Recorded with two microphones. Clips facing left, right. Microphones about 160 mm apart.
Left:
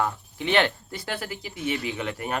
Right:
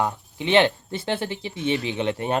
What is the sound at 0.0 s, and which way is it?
Speech, 20° right (ahead or behind).